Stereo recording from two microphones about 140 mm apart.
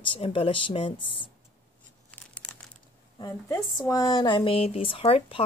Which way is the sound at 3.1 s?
25° left (ahead or behind).